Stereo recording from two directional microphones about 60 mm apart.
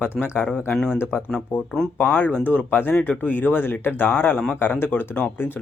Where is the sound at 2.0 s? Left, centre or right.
Left.